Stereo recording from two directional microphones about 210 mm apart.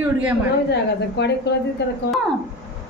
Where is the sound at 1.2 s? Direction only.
55° left (ahead or behind).